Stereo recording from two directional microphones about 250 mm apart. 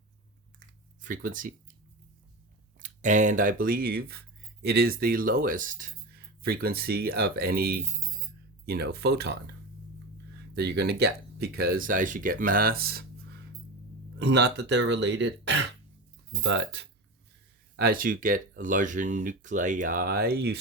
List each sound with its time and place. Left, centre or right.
1.0 s speech: right
2.7 s speech: right
14.2 s speech: right